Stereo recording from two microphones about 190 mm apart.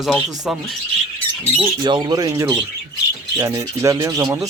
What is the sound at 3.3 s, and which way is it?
Rub, 15° right (ahead or behind).